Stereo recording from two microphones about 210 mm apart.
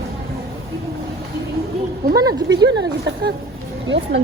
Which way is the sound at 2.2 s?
15° right (ahead or behind).